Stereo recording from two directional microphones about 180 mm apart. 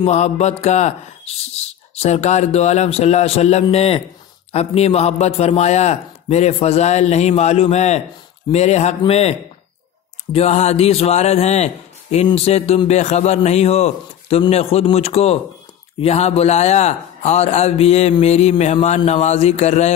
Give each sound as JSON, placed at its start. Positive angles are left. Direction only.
{"t": 0.0, "sound": "speech", "side_deg": 40}
{"t": 10.3, "sound": "speech", "side_deg": 35}